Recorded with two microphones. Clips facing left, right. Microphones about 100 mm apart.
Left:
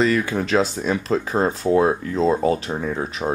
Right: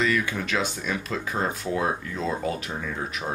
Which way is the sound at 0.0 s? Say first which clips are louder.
Left 6 dB; 35° left (ahead or behind).